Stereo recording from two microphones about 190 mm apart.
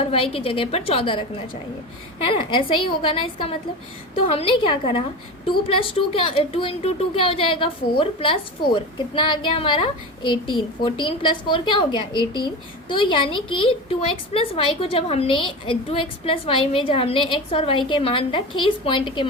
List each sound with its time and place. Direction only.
0.0 s a woman's voice: 30° left (ahead or behind)